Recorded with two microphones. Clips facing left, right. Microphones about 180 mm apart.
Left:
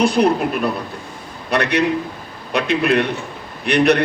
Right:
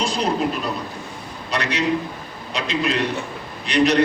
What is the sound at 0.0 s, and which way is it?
A man's voice, 60° left (ahead or behind).